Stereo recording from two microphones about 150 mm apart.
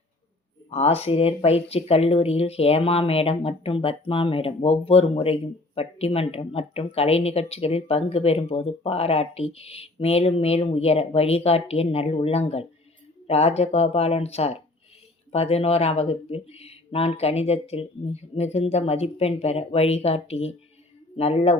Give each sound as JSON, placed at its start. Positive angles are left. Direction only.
{"t": 0.7, "sound": "speech", "side_deg": 45}